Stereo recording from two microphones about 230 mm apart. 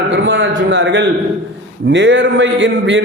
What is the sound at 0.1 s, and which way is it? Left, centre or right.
A man's voice, right.